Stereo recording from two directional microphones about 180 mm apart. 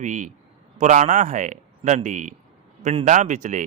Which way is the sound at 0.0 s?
45° right (ahead or behind).